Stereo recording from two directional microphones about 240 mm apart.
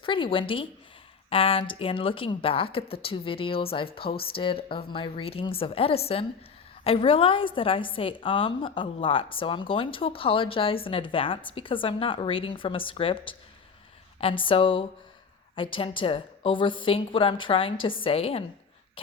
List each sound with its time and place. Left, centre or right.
0.0 s a woman's voice: left